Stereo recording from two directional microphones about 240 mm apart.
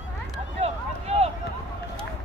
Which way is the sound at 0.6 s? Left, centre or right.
Right.